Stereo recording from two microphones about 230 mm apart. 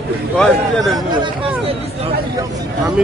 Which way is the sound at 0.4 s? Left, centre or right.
Centre.